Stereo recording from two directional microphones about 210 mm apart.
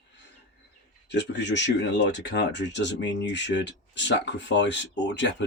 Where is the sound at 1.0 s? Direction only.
55° left (ahead or behind).